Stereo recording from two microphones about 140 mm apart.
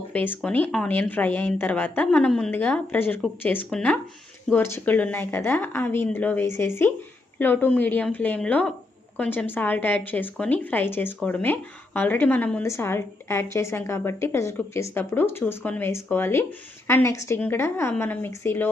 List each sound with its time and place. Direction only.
0.1 s a woman's voice: 10° left (ahead or behind)